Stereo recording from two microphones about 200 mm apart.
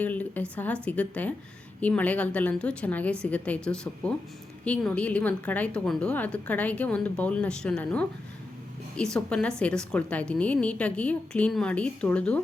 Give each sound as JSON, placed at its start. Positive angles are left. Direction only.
{"t": 0.0, "sound": "a woman's voice", "side_deg": 10}